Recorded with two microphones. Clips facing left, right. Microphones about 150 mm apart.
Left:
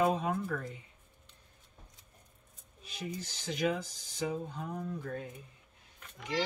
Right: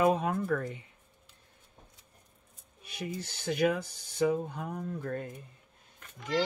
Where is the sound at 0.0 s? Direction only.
60° right (ahead or behind).